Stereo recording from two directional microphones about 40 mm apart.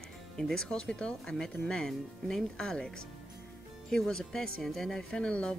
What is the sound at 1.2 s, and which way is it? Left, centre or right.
Speech, centre.